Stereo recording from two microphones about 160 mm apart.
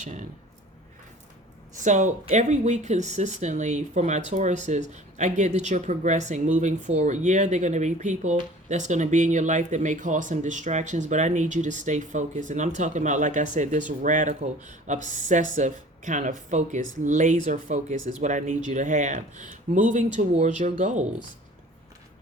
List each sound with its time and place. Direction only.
1.7 s speech: 50° right (ahead or behind)